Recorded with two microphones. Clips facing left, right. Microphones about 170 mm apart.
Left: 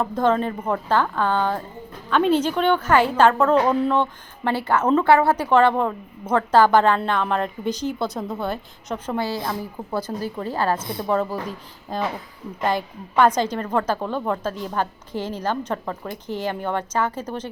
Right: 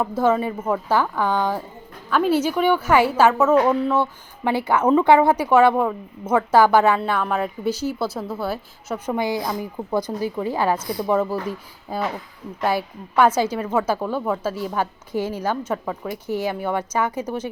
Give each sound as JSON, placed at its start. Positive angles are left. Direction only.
{"t": 0.2, "sound": "a woman's voice", "side_deg": -10}
{"t": 9.1, "sound": "a woman's voice", "side_deg": -15}
{"t": 10.8, "sound": "a woman's voice", "side_deg": 25}
{"t": 11.0, "sound": "a woman's voice", "side_deg": -10}